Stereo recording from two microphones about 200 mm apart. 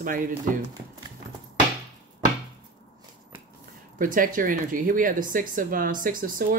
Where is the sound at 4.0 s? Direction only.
40° right (ahead or behind).